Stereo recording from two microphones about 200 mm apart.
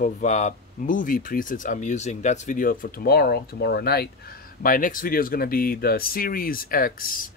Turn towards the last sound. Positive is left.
turn(degrees=45)  # may be behind; listen again after turning